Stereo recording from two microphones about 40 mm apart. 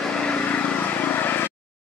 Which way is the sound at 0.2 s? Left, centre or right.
Left.